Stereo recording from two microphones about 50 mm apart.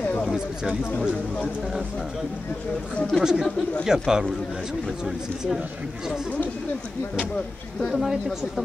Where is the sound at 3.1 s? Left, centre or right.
Centre.